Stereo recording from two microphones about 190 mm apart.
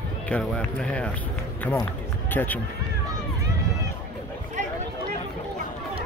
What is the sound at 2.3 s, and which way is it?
Speech, 10° left (ahead or behind).